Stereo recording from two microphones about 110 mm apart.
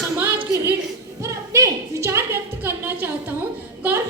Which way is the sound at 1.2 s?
25° right (ahead or behind).